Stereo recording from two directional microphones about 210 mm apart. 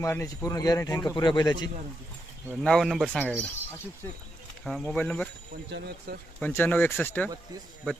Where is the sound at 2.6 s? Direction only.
Centre (ahead or behind).